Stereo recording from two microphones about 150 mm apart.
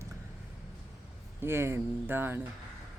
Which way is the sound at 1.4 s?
15° right (ahead or behind).